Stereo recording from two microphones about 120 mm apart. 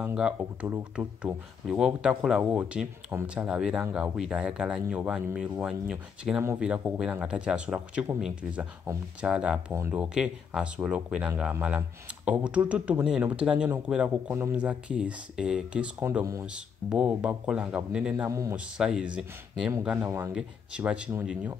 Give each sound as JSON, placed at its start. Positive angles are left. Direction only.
{"t": 0.0, "sound": "speech", "side_deg": -10}
{"t": 18.3, "sound": "speech", "side_deg": -25}
{"t": 18.8, "sound": "speech", "side_deg": -5}
{"t": 20.1, "sound": "speech", "side_deg": -25}
{"t": 20.3, "sound": "speech", "side_deg": -10}